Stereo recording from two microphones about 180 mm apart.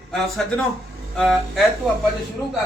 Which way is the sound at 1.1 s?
Centre (ahead or behind).